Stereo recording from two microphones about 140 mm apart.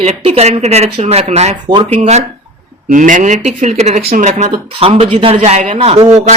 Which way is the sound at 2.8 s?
65° right (ahead or behind).